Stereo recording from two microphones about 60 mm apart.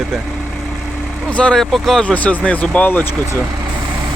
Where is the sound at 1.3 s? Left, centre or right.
Centre.